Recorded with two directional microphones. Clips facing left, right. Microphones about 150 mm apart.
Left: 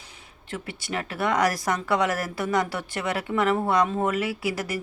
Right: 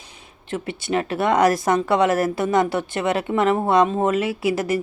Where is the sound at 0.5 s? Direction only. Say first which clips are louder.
Right 8 dB; 25° right (ahead or behind).